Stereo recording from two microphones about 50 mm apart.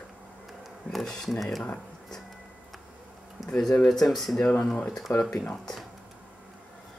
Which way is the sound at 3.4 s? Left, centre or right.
Centre.